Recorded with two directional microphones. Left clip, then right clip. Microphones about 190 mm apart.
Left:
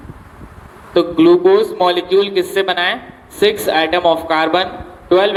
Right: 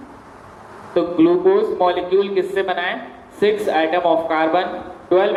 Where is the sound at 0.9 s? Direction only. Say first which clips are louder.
Left 5 dB; 60° left (ahead or behind).